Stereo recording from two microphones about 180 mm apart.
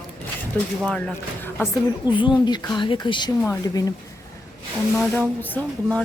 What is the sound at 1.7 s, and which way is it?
A woman's voice, 25° left (ahead or behind).